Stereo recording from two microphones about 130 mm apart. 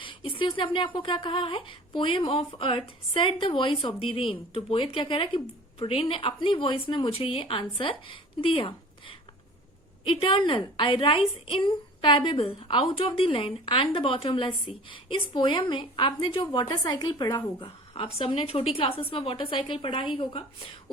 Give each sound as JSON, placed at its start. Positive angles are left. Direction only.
{"t": 0.0, "sound": "a woman's voice", "side_deg": 40}